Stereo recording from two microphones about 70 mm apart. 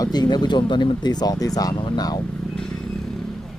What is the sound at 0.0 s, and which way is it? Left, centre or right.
Speech, left.